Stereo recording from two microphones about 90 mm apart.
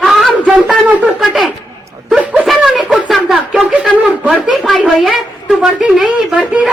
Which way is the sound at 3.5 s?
15° right (ahead or behind).